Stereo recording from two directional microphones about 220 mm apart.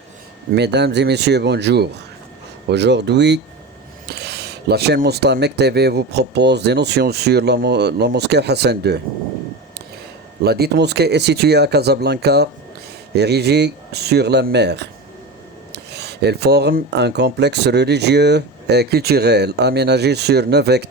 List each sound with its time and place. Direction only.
0.5 s speech: 50° right (ahead or behind)
10.4 s speech: 45° right (ahead or behind)